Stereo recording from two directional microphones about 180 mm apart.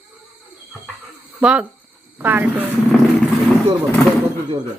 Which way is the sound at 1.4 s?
5° right (ahead or behind).